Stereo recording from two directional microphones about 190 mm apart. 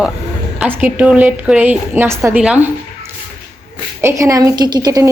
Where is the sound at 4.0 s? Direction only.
15° right (ahead or behind).